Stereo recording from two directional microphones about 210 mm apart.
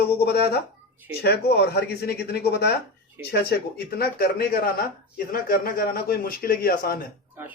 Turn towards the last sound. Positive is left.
turn(degrees=45)  # may be behind; listen again after turning